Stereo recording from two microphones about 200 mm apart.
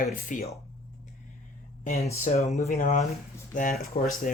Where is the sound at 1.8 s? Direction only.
35° left (ahead or behind).